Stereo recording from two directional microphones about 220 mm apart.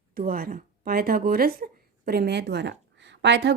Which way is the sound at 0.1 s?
40° right (ahead or behind).